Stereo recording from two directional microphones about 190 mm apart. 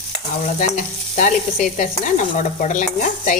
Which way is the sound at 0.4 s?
40° left (ahead or behind).